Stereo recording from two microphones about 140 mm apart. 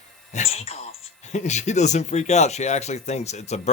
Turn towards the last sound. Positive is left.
turn(degrees=50)  # may be behind; listen again after turning